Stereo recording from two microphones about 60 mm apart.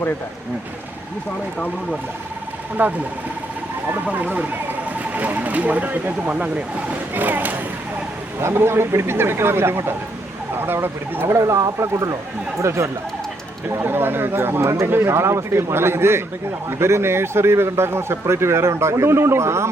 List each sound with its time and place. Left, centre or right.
2.8 s speech: right
4.0 s speech: right
8.4 s speech: right
11.3 s speech: right
13.7 s speech: right